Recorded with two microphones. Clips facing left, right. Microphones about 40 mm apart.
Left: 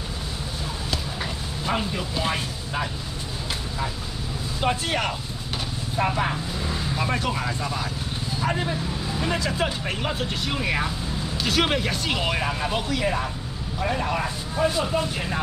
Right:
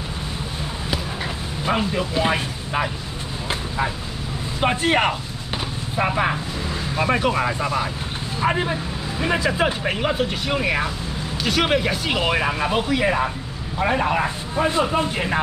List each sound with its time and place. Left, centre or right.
1.6 s speech: centre
3.4 s vehicle: right
4.6 s speech: right